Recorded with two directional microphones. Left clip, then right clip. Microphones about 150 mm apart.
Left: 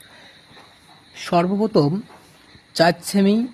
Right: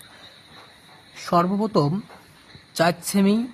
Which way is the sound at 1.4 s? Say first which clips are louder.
Left 4 dB; 5° left (ahead or behind).